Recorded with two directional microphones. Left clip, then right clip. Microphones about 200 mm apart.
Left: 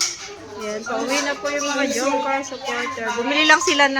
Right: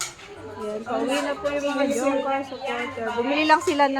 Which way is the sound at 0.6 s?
Centre (ahead or behind).